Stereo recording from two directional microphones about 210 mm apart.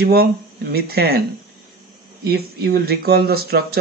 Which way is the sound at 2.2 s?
45° right (ahead or behind).